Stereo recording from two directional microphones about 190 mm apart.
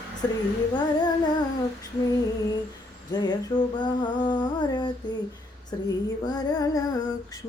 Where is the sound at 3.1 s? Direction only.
20° left (ahead or behind).